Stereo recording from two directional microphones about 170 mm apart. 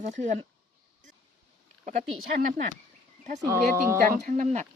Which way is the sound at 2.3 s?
55° right (ahead or behind).